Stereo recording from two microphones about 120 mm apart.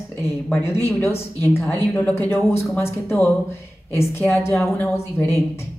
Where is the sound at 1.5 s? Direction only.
20° left (ahead or behind).